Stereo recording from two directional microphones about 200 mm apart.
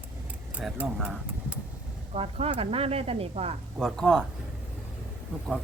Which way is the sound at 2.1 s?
30° right (ahead or behind).